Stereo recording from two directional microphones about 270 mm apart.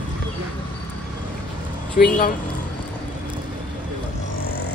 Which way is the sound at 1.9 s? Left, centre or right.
Left.